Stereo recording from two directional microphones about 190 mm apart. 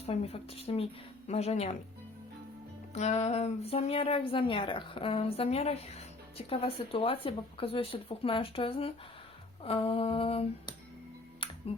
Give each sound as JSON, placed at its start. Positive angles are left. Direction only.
{"t": 0.0, "sound": "a woman's voice", "side_deg": 30}
{"t": 2.9, "sound": "a woman's voice", "side_deg": 35}
{"t": 9.6, "sound": "a sound", "side_deg": 30}
{"t": 11.4, "sound": "music", "side_deg": 30}